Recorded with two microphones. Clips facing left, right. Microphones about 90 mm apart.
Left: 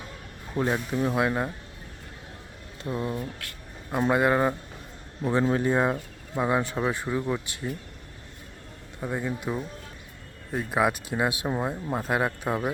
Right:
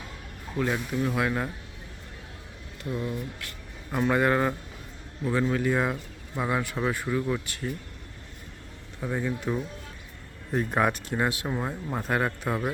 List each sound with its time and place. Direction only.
0.5 s speech: 25° left (ahead or behind)
2.8 s speech: 30° left (ahead or behind)
4.1 s speech: 20° left (ahead or behind)
5.2 s speech: 30° left (ahead or behind)
9.0 s speech: 10° left (ahead or behind)